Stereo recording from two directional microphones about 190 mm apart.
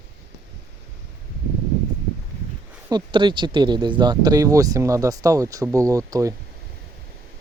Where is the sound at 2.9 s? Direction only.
25° right (ahead or behind).